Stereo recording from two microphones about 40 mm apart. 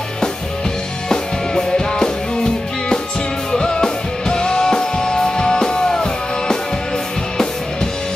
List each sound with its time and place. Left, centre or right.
1.0 s music: centre